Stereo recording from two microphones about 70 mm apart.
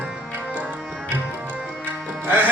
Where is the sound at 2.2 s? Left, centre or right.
Right.